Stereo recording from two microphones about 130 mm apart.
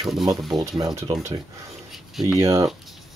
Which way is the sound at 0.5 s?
30° right (ahead or behind).